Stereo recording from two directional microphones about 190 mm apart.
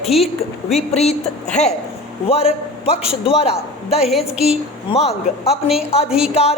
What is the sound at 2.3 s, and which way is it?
A woman's voice, 30° left (ahead or behind).